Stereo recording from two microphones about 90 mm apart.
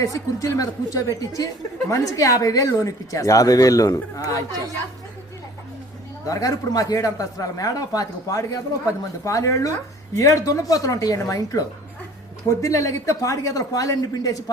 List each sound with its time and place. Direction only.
0.0 s speech: 40° left (ahead or behind)
6.2 s speech: 40° left (ahead or behind)